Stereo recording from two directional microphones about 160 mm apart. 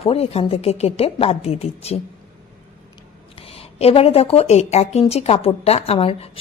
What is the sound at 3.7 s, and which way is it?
Speech, 40° left (ahead or behind).